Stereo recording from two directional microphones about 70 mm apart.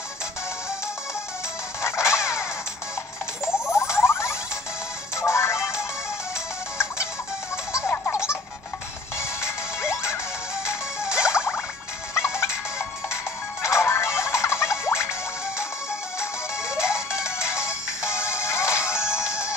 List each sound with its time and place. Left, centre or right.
1.8 s music: left
3.5 s a sound: left
5.1 s music: left
8.1 s music: left
17.4 s music: left